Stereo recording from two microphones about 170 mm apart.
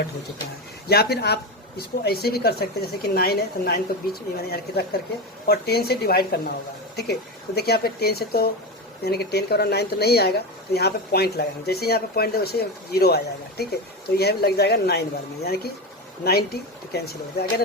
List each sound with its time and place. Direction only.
0.9 s speech: 65° left (ahead or behind)